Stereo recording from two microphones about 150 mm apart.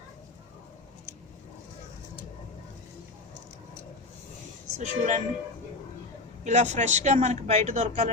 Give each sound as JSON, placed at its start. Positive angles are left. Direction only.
{"t": 4.8, "sound": "speech", "side_deg": -50}
{"t": 6.4, "sound": "speech", "side_deg": -50}